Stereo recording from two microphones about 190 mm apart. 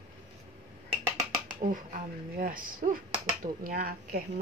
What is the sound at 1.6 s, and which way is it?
Speech, 45° right (ahead or behind).